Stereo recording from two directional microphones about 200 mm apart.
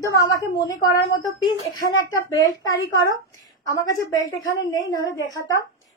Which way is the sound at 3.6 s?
20° left (ahead or behind).